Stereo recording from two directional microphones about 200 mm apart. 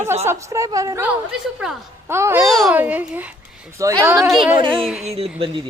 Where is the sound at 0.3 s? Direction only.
15° right (ahead or behind).